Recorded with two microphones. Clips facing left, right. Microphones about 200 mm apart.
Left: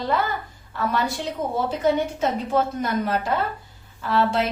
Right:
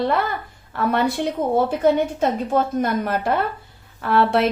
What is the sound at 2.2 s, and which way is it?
A woman's voice, 50° right (ahead or behind).